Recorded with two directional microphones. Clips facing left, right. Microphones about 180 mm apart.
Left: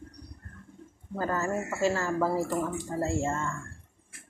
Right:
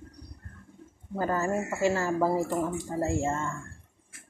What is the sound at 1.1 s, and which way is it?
Speech, 20° right (ahead or behind).